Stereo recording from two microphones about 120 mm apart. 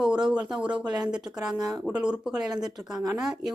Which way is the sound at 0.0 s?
5° right (ahead or behind).